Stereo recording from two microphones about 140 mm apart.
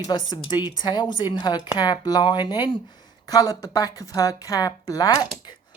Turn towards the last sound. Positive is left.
turn(degrees=25)  # may be behind; listen again after turning